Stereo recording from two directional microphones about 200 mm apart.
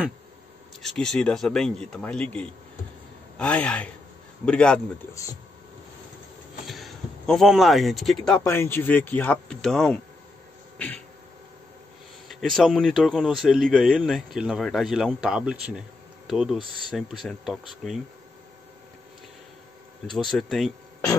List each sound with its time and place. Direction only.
0.8 s speech: 5° left (ahead or behind)
5.1 s speech: 15° left (ahead or behind)
6.6 s speech: centre (ahead or behind)
8.5 s speech: 10° left (ahead or behind)
12.3 s speech: centre (ahead or behind)
20.1 s speech: centre (ahead or behind)